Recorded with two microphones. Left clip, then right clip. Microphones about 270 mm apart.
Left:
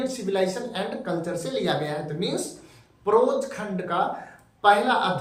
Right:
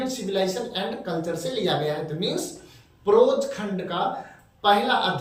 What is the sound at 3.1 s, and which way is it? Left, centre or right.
A man's voice, centre.